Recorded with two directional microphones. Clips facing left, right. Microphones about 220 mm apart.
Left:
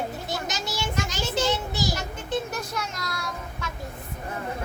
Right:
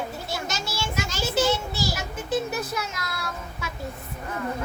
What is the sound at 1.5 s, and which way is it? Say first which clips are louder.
Child singing: right 1 dB; 20° left (ahead or behind).